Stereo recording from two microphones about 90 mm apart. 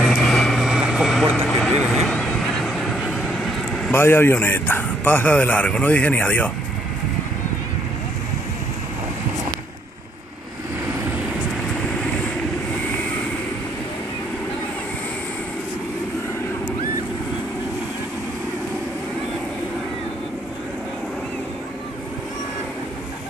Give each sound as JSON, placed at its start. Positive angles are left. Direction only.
{"t": 0.0, "sound": "vehicle", "side_deg": 5}
{"t": 3.9, "sound": "speech", "side_deg": 25}